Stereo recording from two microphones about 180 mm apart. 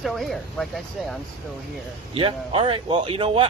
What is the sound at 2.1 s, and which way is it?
A man's voice, 30° right (ahead or behind).